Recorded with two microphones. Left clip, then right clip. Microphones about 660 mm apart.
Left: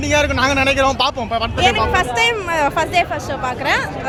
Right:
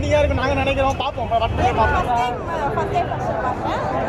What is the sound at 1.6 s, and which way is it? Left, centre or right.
Speech, left.